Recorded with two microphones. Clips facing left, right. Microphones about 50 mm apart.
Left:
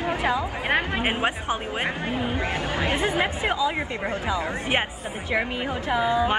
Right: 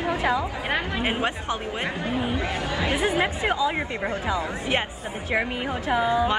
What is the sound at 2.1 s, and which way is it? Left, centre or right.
Speech, left.